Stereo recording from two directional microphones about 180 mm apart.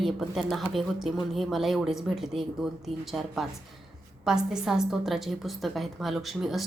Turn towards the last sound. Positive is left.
turn(degrees=0)  # may be behind; listen again after turning